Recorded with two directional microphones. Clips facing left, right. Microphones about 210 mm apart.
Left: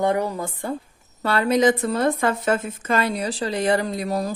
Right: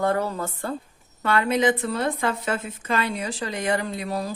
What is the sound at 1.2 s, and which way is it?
A woman's voice, 35° left (ahead or behind).